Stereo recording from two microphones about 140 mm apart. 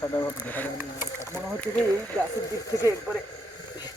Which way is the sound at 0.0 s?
20° left (ahead or behind).